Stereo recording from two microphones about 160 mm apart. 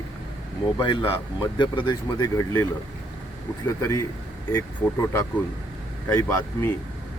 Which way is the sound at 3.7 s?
20° left (ahead or behind).